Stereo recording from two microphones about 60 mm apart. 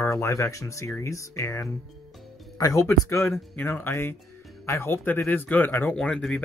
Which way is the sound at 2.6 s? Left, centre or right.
Left.